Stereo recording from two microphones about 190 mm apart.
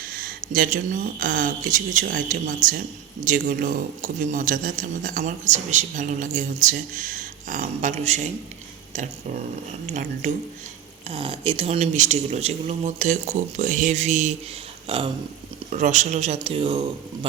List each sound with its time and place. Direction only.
0.0 s speech: 50° right (ahead or behind)
9.8 s speech: 40° right (ahead or behind)
11.1 s speech: 25° right (ahead or behind)
14.8 s a sound: 30° right (ahead or behind)
15.7 s speech: 40° right (ahead or behind)